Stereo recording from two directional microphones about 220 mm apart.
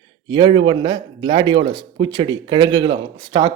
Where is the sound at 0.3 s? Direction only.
20° right (ahead or behind).